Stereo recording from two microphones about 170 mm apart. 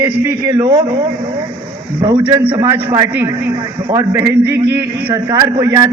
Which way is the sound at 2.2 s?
10° right (ahead or behind).